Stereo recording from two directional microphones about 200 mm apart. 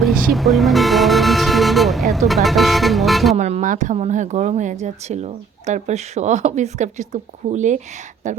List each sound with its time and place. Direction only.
0.0 s speech: centre (ahead or behind)
3.3 s speech: 35° right (ahead or behind)